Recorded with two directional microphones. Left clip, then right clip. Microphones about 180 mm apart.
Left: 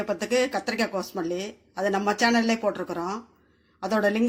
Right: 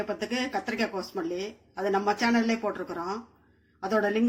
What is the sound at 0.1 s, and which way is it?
A woman's voice, 30° left (ahead or behind).